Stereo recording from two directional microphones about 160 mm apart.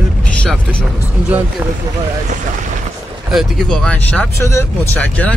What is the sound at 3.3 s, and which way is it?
Speech, centre (ahead or behind).